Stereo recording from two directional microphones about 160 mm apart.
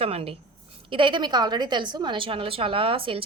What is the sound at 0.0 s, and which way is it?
A woman's voice, 35° right (ahead or behind).